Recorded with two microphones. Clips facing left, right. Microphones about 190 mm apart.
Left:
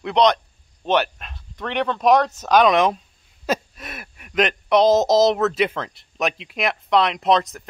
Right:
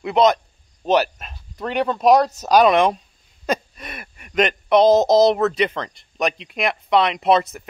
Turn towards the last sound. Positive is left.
turn(degrees=-5)  # may be behind; listen again after turning